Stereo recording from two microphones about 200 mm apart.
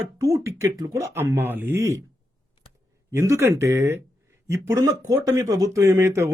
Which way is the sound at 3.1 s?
15° right (ahead or behind).